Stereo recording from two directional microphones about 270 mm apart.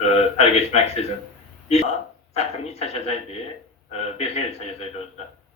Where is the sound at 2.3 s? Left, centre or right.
Left.